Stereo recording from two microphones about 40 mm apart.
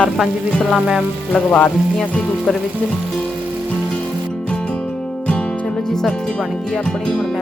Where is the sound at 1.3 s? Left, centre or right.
Left.